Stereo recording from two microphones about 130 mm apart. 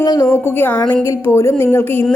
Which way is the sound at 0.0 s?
30° left (ahead or behind).